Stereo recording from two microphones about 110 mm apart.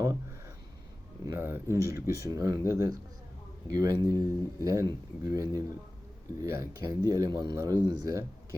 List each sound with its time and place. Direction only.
1.3 s speech: 20° right (ahead or behind); by 8.2 s 35° right (ahead or behind)